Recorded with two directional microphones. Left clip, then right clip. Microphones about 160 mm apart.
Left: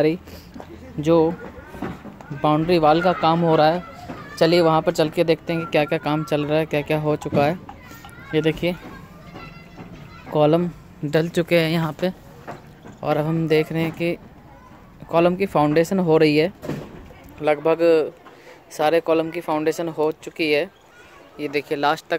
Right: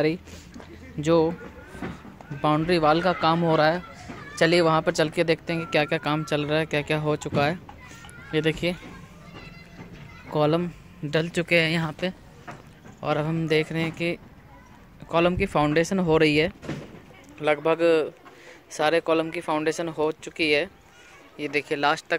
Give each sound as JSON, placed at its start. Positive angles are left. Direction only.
{"t": 0.0, "sound": "speech", "side_deg": 5}
{"t": 2.4, "sound": "speech", "side_deg": 5}
{"t": 10.3, "sound": "speech", "side_deg": 15}